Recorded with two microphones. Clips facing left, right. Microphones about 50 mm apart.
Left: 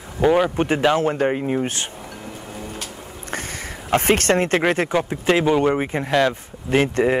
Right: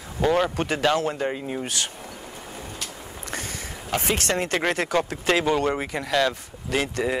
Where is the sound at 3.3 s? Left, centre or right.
Left.